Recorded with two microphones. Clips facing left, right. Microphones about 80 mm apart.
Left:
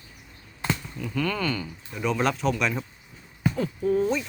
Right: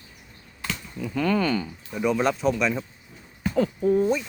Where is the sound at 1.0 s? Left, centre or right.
Centre.